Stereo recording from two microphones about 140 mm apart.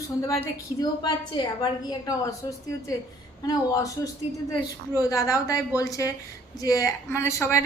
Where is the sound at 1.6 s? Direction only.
25° left (ahead or behind).